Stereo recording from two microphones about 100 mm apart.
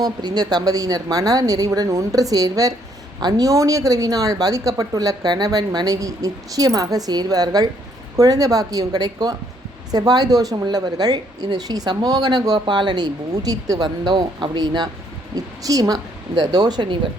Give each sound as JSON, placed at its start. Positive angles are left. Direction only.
{"t": 0.0, "sound": "a woman's voice", "side_deg": -45}